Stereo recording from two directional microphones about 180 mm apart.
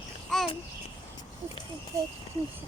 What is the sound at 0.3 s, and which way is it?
Babbling, centre (ahead or behind).